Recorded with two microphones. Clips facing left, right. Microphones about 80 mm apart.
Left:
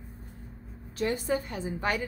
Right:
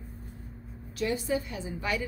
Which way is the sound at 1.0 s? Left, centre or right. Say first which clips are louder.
Left 1 dB; left.